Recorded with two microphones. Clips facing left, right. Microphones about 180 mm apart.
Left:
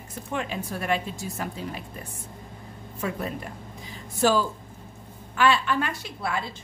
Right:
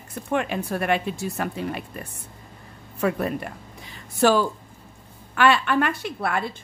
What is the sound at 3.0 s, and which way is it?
Speech, 65° right (ahead or behind).